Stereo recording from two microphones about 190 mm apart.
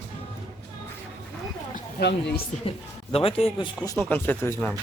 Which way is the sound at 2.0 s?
60° left (ahead or behind).